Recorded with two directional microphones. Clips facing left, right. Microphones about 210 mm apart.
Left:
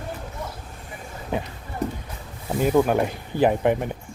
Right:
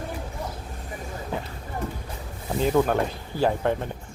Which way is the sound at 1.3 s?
20° left (ahead or behind).